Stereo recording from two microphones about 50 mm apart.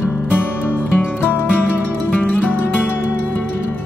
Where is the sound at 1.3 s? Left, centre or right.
Left.